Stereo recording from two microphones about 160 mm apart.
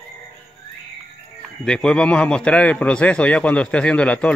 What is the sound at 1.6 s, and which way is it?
A man's voice, 5° left (ahead or behind).